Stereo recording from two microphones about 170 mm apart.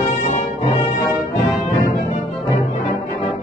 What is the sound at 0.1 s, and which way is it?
Music, 40° left (ahead or behind).